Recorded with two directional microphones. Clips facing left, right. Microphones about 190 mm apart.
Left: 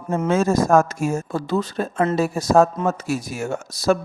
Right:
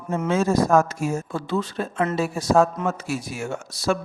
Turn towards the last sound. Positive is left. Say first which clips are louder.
# left 4 dB
turn(degrees=40)  # may be behind; listen again after turning